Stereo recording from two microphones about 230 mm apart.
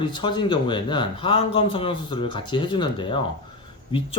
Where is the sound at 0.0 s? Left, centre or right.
Centre.